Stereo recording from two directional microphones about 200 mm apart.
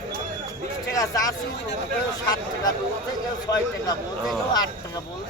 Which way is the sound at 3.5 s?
20° left (ahead or behind).